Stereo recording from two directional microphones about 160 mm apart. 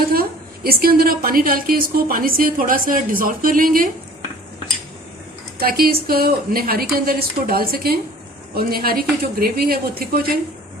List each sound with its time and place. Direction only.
0.1 s a woman's voice: 70° right (ahead or behind)
5.5 s a woman's voice: 70° right (ahead or behind)